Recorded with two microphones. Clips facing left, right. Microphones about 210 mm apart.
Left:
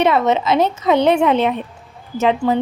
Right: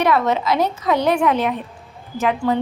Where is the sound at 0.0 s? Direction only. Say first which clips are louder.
Left 2 dB; 25° left (ahead or behind).